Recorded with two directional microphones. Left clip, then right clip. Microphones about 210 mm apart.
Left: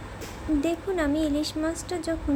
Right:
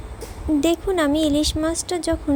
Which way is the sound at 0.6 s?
30° right (ahead or behind).